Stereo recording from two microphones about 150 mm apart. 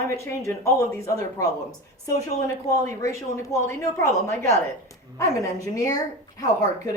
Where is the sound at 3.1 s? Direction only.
20° left (ahead or behind).